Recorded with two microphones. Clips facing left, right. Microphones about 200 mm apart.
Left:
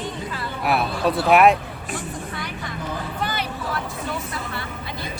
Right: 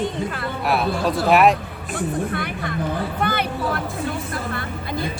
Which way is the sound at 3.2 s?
55° right (ahead or behind).